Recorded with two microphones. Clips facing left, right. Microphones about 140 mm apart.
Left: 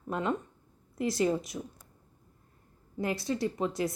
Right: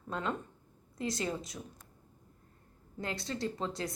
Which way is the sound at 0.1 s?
20° left (ahead or behind).